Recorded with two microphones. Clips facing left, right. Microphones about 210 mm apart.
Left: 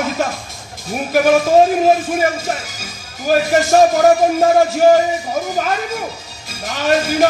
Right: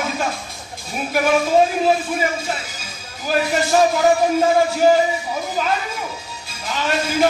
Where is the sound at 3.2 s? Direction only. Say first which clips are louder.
Left 5 dB; 45° left (ahead or behind).